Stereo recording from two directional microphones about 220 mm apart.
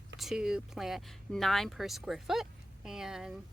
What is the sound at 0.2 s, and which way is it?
Speech, centre (ahead or behind).